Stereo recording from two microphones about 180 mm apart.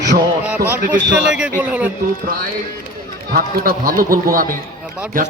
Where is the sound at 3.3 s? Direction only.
55° right (ahead or behind).